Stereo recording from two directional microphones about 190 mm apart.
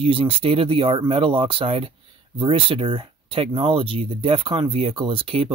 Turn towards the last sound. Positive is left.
turn(degrees=-30)  # may be behind; listen again after turning